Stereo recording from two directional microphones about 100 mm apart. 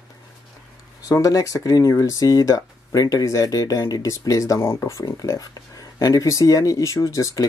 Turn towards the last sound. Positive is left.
turn(degrees=30)  # may be behind; listen again after turning